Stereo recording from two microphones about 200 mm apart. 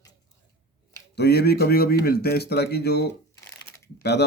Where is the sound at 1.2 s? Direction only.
55° left (ahead or behind).